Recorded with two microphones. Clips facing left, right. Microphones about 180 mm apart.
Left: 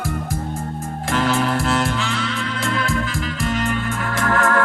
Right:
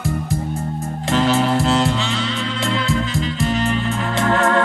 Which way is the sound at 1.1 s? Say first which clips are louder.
Right 3 dB; 25° right (ahead or behind).